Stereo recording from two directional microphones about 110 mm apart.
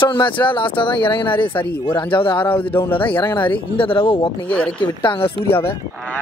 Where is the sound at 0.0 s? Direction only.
50° left (ahead or behind).